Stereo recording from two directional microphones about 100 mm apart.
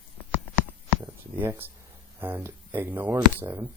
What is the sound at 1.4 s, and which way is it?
Speech, 20° right (ahead or behind).